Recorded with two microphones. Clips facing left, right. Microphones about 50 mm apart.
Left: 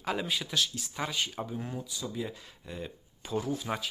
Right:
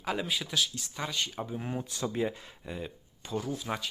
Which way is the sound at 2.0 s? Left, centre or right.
Right.